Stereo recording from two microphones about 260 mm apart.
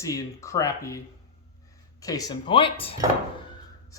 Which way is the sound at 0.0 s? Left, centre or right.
Centre.